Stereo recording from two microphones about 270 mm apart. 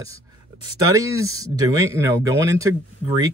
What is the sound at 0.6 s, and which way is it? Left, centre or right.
Speech, right.